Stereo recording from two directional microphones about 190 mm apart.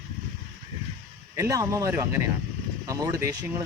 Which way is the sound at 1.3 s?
15° right (ahead or behind).